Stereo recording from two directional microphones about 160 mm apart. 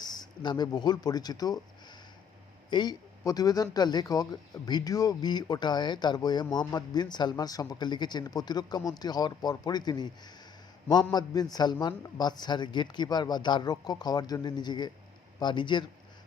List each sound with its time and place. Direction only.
0.0 s speech: 25° left (ahead or behind)
2.6 s a man's voice: 25° left (ahead or behind)